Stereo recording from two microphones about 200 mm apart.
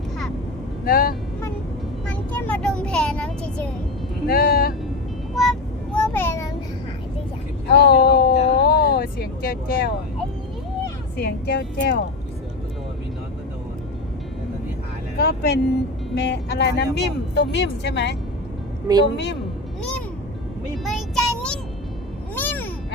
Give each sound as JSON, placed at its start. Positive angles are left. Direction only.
{"t": 0.9, "sound": "speech", "side_deg": 50}
{"t": 2.0, "sound": "child singing", "side_deg": 5}
{"t": 4.3, "sound": "a sound", "side_deg": 50}
{"t": 5.3, "sound": "vehicle", "side_deg": 0}
{"t": 6.0, "sound": "a sound", "side_deg": 10}
{"t": 7.7, "sound": "vehicle", "side_deg": 55}
{"t": 11.2, "sound": "speech", "side_deg": 50}
{"t": 15.2, "sound": "speech", "side_deg": 55}
{"t": 20.8, "sound": "child singing", "side_deg": 0}
{"t": 22.4, "sound": "meow", "side_deg": 10}